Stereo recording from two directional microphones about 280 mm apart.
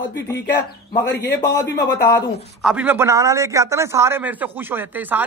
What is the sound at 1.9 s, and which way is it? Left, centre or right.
Speech, left.